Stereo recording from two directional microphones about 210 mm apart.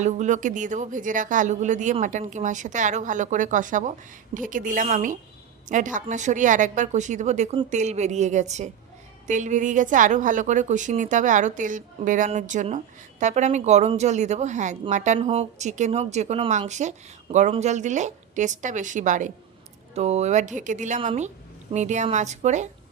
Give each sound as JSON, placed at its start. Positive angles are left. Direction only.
{"t": 0.0, "sound": "speech", "side_deg": -35}